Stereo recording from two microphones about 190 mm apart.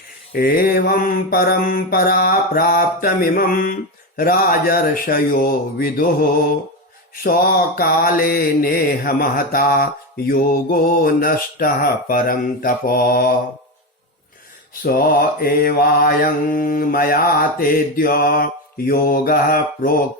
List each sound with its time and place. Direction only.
0.3 s mantra: 50° left (ahead or behind)
7.3 s mantra: 50° left (ahead or behind)
14.8 s mantra: 50° left (ahead or behind)